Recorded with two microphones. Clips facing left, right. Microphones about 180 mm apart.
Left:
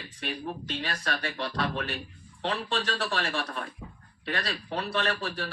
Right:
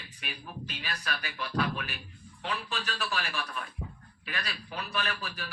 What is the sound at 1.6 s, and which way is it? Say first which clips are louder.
Speech: left 3 dB; 30° left (ahead or behind).